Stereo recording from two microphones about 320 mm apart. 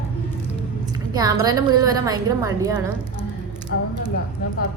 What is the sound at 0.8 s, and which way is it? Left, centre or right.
A woman's voice, centre.